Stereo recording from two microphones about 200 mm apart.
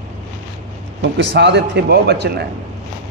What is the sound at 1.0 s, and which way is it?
A man's voice, 60° right (ahead or behind).